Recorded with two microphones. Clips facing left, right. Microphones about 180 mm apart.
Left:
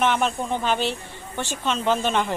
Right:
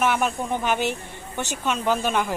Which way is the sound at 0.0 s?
10° right (ahead or behind).